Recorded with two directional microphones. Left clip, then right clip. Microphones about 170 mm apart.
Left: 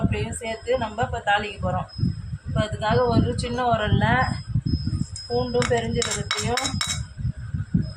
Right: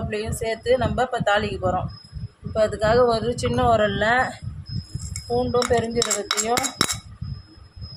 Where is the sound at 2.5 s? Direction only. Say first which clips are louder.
Right 5 dB; 65° right (ahead or behind).